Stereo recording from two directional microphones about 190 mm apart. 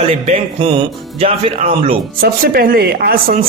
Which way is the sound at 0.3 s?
30° right (ahead or behind).